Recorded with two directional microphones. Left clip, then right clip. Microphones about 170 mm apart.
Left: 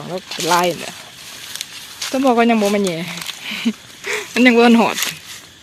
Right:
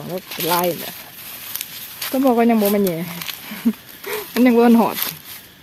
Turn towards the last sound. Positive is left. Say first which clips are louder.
# left 2 dB
turn(degrees=-5)  # may be behind; listen again after turning